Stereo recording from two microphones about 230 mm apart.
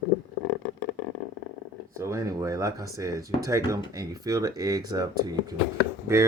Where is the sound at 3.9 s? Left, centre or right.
Centre.